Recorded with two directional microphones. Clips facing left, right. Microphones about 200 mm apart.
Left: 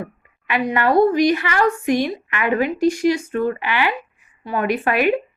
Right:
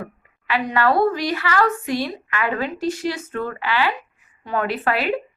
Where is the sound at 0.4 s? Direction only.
20° left (ahead or behind).